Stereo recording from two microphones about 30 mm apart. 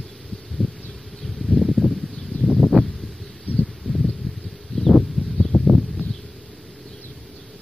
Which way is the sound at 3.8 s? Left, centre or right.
Centre.